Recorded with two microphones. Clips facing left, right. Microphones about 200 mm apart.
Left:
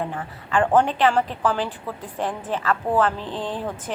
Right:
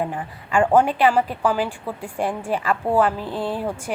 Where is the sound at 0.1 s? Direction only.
15° right (ahead or behind).